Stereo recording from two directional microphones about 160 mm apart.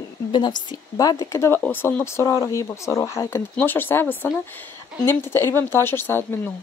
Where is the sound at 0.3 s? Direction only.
25° left (ahead or behind).